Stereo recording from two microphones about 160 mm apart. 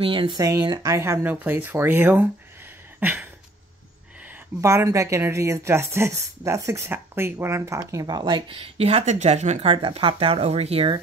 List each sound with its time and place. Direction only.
0.0 s speech: 30° right (ahead or behind); by 2.2 s 10° right (ahead or behind)
3.0 s a sound: 10° right (ahead or behind)
4.6 s speech: 20° right (ahead or behind); by 11.0 s 35° right (ahead or behind)